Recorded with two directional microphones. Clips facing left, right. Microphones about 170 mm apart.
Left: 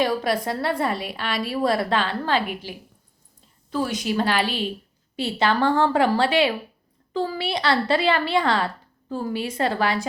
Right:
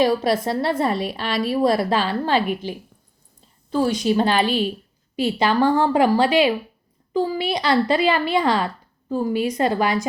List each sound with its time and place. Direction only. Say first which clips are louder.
0.0 s a woman's voice: right 4 dB; 25° right (ahead or behind)
3.7 s a woman's voice: right 5 dB; 30° right (ahead or behind)